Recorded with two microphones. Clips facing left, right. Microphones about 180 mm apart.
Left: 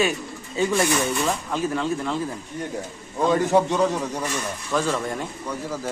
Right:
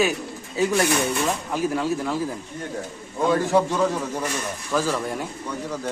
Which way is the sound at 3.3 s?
20° left (ahead or behind).